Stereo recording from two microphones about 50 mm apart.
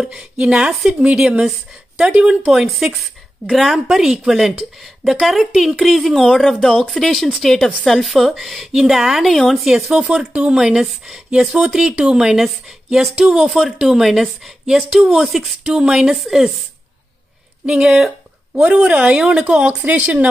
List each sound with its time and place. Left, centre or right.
0.0 s a woman's voice: centre
2.4 s a woman's voice: centre
9.3 s speech: centre
9.6 s a woman's voice: centre
15.6 s a woman's voice: centre
17.6 s a woman's voice: centre
18.5 s speech: centre